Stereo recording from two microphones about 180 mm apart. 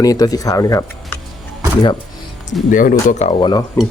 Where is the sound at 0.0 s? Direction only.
20° left (ahead or behind).